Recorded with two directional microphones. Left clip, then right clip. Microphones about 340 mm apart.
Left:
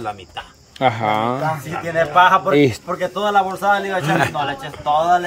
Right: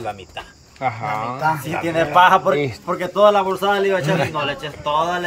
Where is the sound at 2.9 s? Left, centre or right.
Centre.